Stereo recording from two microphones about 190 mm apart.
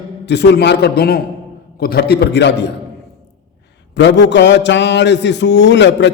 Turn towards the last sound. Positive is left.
turn(degrees=70)  # may be behind; listen again after turning